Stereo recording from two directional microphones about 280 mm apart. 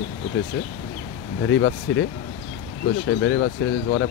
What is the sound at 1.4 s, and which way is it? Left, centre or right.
Speech, left.